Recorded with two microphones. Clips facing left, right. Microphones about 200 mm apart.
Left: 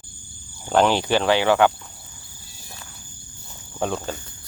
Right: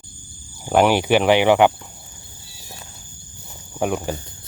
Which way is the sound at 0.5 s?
10° right (ahead or behind).